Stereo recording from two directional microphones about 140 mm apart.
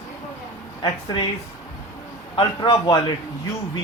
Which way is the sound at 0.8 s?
35° left (ahead or behind).